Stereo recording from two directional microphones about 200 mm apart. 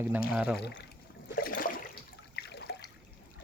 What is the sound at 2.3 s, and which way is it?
Water, 55° left (ahead or behind).